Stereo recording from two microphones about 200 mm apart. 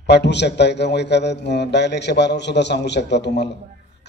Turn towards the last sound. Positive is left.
turn(degrees=60)  # may be behind; listen again after turning